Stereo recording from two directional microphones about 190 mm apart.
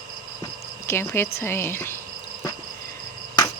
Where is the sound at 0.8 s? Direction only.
15° left (ahead or behind).